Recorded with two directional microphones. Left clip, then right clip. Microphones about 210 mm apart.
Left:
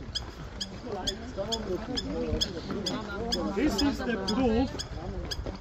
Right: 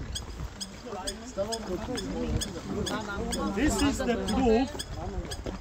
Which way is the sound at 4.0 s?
30° right (ahead or behind).